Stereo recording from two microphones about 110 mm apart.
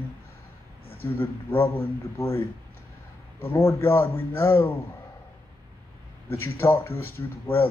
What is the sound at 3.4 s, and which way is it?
Speech, 25° left (ahead or behind).